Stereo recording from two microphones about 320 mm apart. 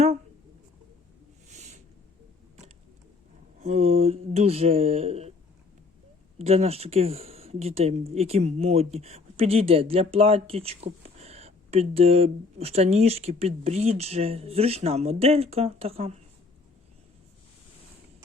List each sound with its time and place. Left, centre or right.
1.5 s a sound: right
3.6 s speech: centre
6.4 s speech: centre